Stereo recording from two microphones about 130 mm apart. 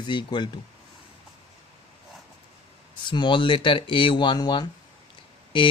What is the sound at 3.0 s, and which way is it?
Speech, 35° left (ahead or behind).